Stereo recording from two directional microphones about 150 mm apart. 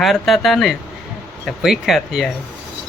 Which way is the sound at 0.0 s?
Centre (ahead or behind).